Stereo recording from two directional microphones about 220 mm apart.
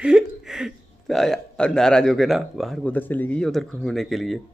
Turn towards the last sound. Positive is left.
turn(degrees=0)  # may be behind; listen again after turning